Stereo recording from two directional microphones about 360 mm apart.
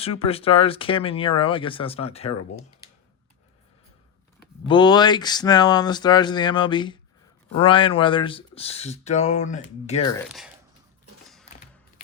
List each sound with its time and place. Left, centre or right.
0.0 s speech: centre
4.7 s speech: centre
10.2 s speech: centre